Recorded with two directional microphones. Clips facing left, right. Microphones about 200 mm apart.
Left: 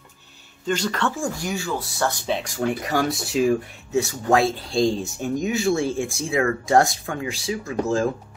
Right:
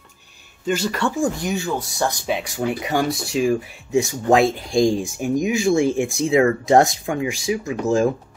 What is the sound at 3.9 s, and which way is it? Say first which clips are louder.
Speech: right 3 dB; 15° right (ahead or behind).